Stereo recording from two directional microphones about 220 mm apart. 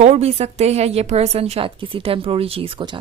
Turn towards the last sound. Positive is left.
turn(degrees=-20)  # may be behind; listen again after turning